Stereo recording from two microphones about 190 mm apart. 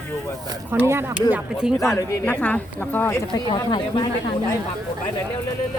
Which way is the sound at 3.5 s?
25° left (ahead or behind).